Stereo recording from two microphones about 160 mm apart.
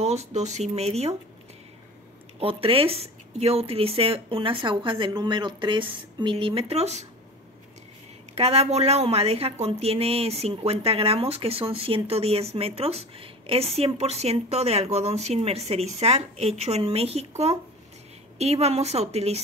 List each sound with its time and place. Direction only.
0.0 s speech: 45° right (ahead or behind)
2.4 s a woman's voice: 35° right (ahead or behind)
8.4 s a woman's voice: 40° right (ahead or behind)
18.4 s a woman's voice: 40° right (ahead or behind)